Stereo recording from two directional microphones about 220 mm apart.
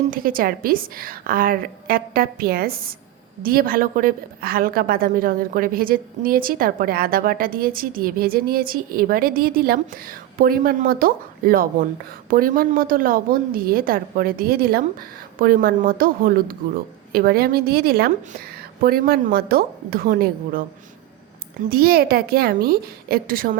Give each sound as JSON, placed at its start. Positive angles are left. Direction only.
{"t": 0.1, "sound": "a woman's voice", "side_deg": -40}
{"t": 21.7, "sound": "a woman's voice", "side_deg": -45}